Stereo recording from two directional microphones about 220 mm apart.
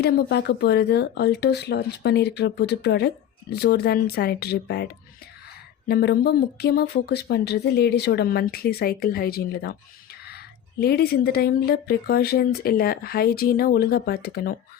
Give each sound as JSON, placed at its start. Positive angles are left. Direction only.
{"t": 0.0, "sound": "speech", "side_deg": 50}
{"t": 5.9, "sound": "speech", "side_deg": 45}